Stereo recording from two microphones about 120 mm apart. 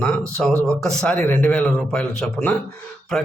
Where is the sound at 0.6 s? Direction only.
5° left (ahead or behind).